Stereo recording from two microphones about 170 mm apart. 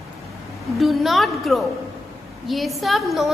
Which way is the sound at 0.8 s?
Centre (ahead or behind).